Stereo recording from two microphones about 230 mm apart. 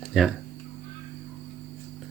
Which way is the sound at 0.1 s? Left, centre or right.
Centre.